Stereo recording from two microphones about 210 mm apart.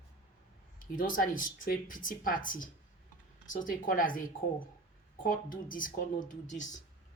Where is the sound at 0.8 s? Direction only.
40° left (ahead or behind).